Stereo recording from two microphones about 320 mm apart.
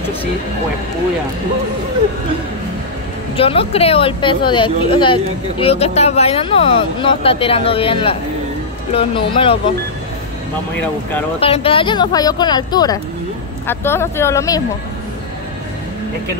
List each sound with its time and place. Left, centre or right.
3.3 s a woman's voice: centre
11.3 s a woman's voice: centre